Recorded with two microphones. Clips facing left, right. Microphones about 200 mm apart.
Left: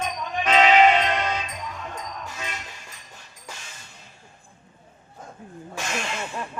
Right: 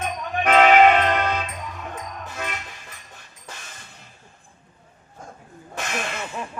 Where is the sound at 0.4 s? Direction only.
50° right (ahead or behind).